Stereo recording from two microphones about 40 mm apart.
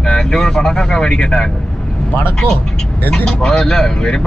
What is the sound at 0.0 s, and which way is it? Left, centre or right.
Speech, centre.